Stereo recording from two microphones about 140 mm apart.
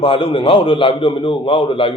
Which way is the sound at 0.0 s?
40° left (ahead or behind).